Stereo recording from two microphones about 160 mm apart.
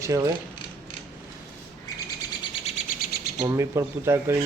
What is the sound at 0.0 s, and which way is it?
Mechanisms, 20° right (ahead or behind).